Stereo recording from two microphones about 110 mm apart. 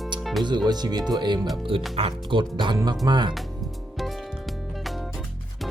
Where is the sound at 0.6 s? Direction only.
40° right (ahead or behind).